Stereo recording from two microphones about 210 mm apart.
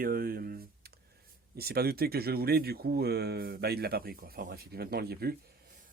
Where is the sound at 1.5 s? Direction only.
50° right (ahead or behind).